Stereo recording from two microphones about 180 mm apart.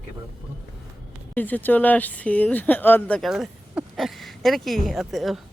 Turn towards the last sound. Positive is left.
turn(degrees=0)  # may be behind; listen again after turning